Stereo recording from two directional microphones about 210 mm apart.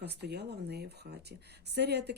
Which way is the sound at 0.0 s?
50° right (ahead or behind).